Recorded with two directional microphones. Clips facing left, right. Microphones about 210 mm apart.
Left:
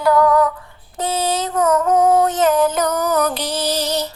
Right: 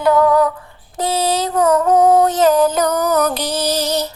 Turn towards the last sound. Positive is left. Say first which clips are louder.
# right 2 dB
turn(degrees=-40)  # may be behind; listen again after turning